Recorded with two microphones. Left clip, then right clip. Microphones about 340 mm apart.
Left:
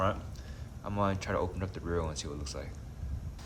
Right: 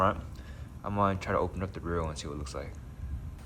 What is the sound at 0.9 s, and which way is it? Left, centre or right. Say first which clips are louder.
Speech: right 3 dB; centre.